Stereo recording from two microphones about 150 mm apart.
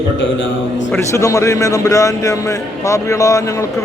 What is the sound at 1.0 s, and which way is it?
Speech, 20° left (ahead or behind).